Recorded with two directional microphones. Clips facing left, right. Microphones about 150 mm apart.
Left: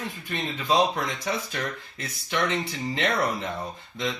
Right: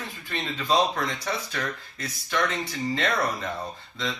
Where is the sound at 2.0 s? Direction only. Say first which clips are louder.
Even; 25° left (ahead or behind).